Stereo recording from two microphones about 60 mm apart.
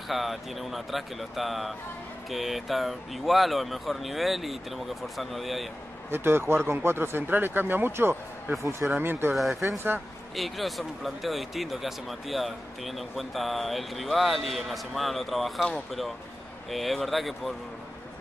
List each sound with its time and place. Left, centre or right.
0.1 s speech: centre
6.0 s speech: right
9.3 s speech: centre